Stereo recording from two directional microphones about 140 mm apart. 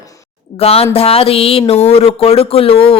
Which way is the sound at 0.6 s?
45° left (ahead or behind).